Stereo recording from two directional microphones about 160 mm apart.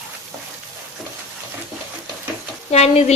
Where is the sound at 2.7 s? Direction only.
40° left (ahead or behind).